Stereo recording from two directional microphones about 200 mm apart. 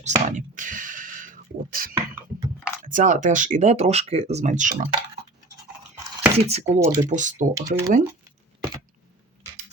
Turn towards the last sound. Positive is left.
turn(degrees=-15)  # may be behind; listen again after turning